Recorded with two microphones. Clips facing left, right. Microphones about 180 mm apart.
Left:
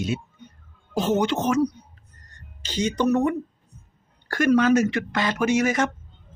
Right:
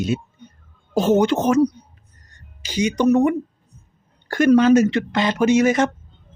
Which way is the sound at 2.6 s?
10° right (ahead or behind).